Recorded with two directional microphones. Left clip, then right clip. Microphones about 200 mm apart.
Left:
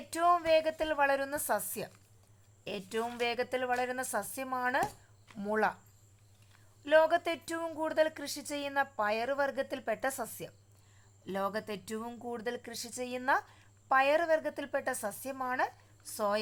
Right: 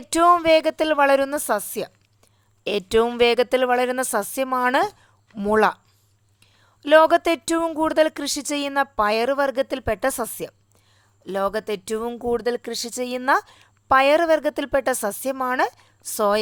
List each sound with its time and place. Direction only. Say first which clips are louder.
0.1 s speech: right 12 dB; 40° right (ahead or behind)
2.6 s a woman's voice: right 17 dB; 50° right (ahead or behind)
6.8 s speech: right 12 dB; 45° right (ahead or behind)